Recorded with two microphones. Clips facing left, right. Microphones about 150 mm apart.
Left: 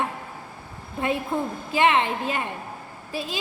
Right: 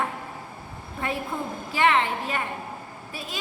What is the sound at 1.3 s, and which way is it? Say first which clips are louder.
A woman's voice: left 4 dB; 25° left (ahead or behind).